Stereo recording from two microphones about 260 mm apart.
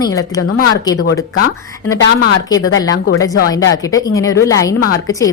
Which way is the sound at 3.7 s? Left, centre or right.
Centre.